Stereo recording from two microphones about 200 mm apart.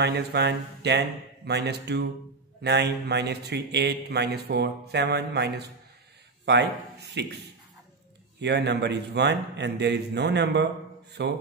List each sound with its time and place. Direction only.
0.0 s a man's voice: 55° right (ahead or behind)
8.4 s a man's voice: 60° right (ahead or behind)